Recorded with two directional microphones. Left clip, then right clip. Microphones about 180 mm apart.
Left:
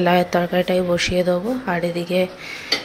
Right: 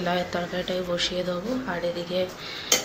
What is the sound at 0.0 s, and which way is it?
Dishes, 45° left (ahead or behind).